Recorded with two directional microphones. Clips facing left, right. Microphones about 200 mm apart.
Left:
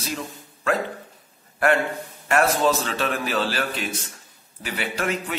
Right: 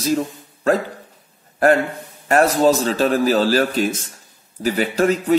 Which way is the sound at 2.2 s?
40° right (ahead or behind).